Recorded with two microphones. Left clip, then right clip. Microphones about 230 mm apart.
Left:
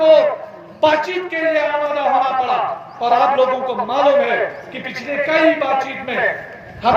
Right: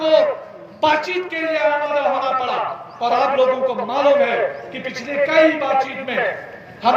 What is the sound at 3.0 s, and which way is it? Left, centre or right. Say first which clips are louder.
A man's voice: left 2 dB; centre.